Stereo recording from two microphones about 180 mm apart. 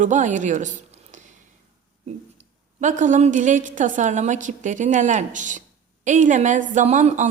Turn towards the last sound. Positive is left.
turn(degrees=-40)  # may be behind; listen again after turning